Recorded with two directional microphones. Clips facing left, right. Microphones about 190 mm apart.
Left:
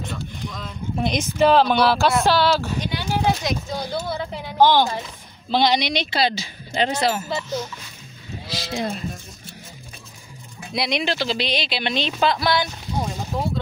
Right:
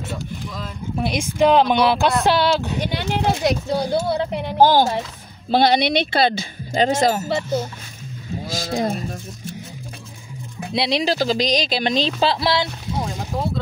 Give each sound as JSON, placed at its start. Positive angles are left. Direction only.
{"t": 0.1, "sound": "speech", "side_deg": -5}
{"t": 2.8, "sound": "speech", "side_deg": -65}
{"t": 4.6, "sound": "speech", "side_deg": -40}
{"t": 5.5, "sound": "speech", "side_deg": -55}
{"t": 6.7, "sound": "speech", "side_deg": -45}
{"t": 7.2, "sound": "speech", "side_deg": -55}
{"t": 10.7, "sound": "speech", "side_deg": -30}